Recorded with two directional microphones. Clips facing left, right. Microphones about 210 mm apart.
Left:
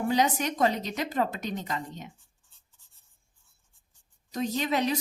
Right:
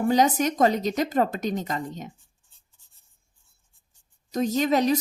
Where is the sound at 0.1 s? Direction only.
45° right (ahead or behind).